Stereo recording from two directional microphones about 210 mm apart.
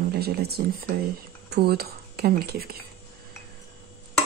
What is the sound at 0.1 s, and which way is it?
Speech, 50° right (ahead or behind).